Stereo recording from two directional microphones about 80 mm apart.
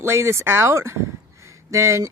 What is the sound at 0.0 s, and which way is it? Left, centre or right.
Speech, right.